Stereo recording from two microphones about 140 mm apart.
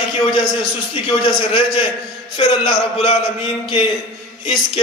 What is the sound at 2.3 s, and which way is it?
Speech, 35° left (ahead or behind).